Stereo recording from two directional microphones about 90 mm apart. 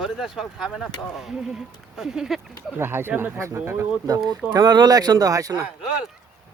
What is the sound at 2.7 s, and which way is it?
Speech, 25° right (ahead or behind).